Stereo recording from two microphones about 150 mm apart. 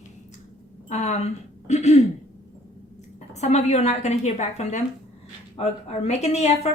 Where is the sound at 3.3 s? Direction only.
50° left (ahead or behind).